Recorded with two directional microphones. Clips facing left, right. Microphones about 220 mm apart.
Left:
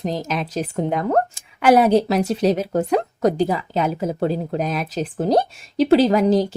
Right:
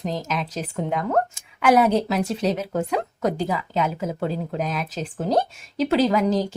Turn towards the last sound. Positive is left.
turn(degrees=35)  # may be behind; listen again after turning